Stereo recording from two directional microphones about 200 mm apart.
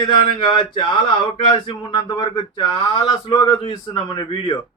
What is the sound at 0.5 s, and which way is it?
Speech, 25° left (ahead or behind).